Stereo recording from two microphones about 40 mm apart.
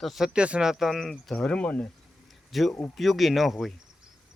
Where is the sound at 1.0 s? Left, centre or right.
Centre.